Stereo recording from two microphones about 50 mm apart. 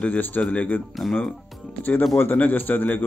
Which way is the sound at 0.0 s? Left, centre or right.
Left.